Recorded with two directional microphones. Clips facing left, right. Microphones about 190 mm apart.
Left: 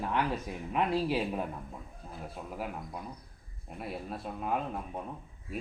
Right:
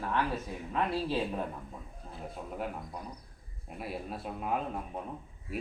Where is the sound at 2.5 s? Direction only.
5° left (ahead or behind).